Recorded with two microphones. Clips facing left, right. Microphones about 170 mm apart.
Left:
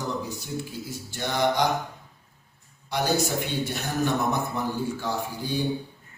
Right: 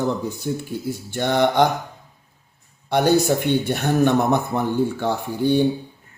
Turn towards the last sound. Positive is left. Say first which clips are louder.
# right 10 dB
turn(degrees=-60)  # may be behind; listen again after turning